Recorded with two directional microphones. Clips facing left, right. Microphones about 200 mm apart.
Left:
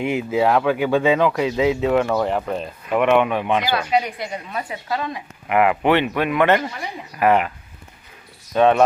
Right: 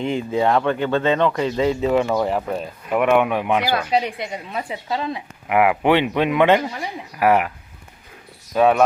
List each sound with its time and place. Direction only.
0.0 s speech: 5° left (ahead or behind); by 3.8 s 10° right (ahead or behind)
3.9 s a woman's voice: 25° right (ahead or behind)
5.5 s speech: 10° right (ahead or behind)
8.5 s speech: 5° right (ahead or behind)